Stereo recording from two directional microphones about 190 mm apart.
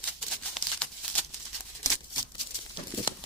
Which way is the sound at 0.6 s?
5° left (ahead or behind).